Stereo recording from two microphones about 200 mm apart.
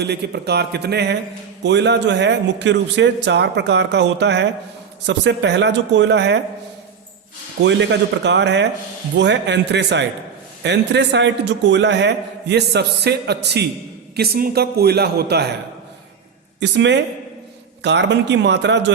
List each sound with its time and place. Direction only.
0.0 s a man's voice: 55° right (ahead or behind)
7.6 s a man's voice: 60° right (ahead or behind)
16.6 s a man's voice: 60° right (ahead or behind)